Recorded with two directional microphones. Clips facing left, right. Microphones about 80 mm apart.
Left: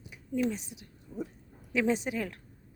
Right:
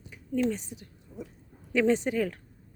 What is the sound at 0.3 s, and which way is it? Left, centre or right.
Speech, centre.